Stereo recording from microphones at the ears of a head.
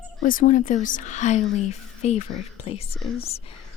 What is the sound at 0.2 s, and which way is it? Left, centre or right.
Speech, left.